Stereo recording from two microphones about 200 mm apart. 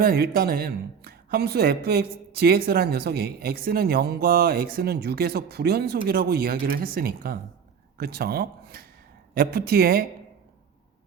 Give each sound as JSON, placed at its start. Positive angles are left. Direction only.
{"t": 0.0, "sound": "speech", "side_deg": -45}